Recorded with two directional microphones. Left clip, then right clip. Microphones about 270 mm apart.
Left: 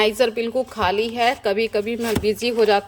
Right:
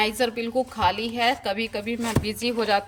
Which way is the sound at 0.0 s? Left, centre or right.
Centre.